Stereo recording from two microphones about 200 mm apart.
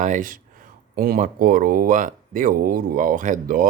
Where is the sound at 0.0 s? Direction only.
40° right (ahead or behind).